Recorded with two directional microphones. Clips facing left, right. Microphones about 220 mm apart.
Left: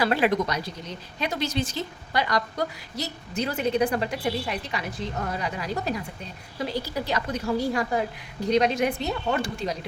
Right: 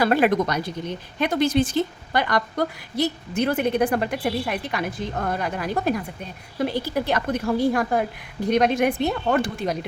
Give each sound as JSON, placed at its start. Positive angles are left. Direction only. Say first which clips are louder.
{"t": 0.0, "sound": "speech", "louder": "right 4 dB", "side_deg": -50}